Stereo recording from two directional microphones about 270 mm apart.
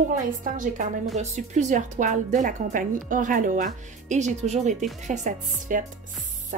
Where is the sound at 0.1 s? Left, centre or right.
Right.